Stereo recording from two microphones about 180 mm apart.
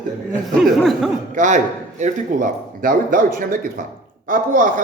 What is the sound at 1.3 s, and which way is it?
Speech, 45° right (ahead or behind).